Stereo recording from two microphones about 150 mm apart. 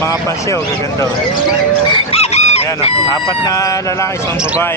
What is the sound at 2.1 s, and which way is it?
Crowing, 45° left (ahead or behind).